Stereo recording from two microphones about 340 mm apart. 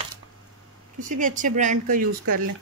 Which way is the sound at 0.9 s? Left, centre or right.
Right.